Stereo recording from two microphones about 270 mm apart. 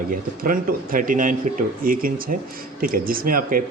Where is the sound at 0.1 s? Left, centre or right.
Right.